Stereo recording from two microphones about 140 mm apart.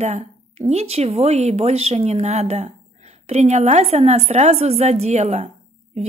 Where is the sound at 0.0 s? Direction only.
50° right (ahead or behind).